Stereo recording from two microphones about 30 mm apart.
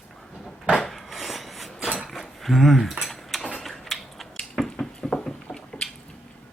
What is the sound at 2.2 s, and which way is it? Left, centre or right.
Speech, centre.